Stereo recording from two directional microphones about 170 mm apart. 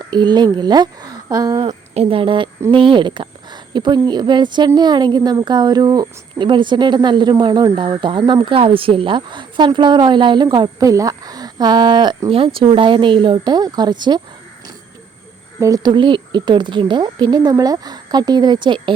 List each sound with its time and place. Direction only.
0.1 s speech: 25° right (ahead or behind)
1.9 s speech: 35° right (ahead or behind)
15.6 s speech: 20° right (ahead or behind)